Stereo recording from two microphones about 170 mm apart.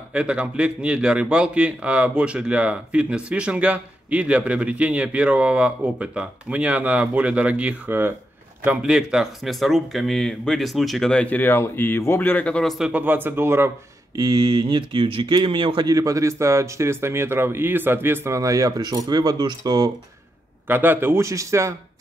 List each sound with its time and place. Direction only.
0.1 s a man's voice: 5° right (ahead or behind); by 19.9 s 25° right (ahead or behind)
20.6 s a man's voice: 10° right (ahead or behind)